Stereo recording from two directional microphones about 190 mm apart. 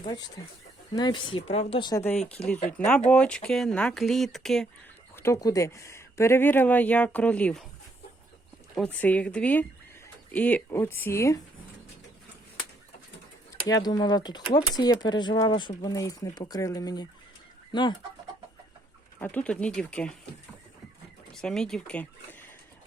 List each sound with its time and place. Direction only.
0.0 s speech: 20° left (ahead or behind)
2.0 s speech: 10° left (ahead or behind)
5.1 s speech: 15° left (ahead or behind)
8.7 s speech: 5° left (ahead or behind)
13.7 s speech: 20° left (ahead or behind)
19.2 s speech: 5° left (ahead or behind)
21.3 s speech: 5° left (ahead or behind)